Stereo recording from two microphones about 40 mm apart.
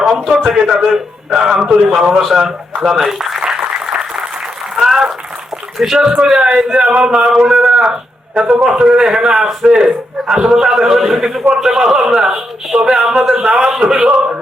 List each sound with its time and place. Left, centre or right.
0.3 s a man's voice: centre
4.7 s applause: centre
5.7 s speech: centre
6.2 s a man's voice: right
7.4 s a sound: right
8.6 s a man's voice: right